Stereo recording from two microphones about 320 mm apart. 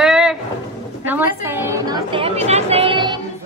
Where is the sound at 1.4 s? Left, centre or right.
Centre.